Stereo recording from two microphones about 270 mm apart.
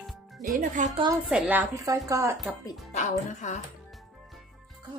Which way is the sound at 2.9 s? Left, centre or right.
Left.